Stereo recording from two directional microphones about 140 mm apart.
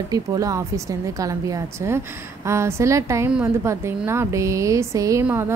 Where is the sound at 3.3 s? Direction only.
10° right (ahead or behind).